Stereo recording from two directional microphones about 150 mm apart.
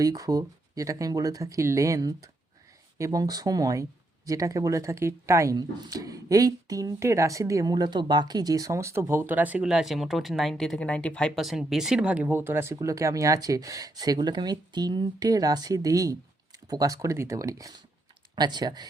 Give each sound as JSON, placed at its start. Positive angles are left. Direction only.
{"t": 0.0, "sound": "speech", "side_deg": -25}